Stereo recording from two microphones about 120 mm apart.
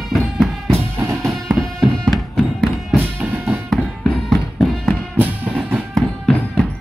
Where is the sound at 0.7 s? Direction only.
20° right (ahead or behind).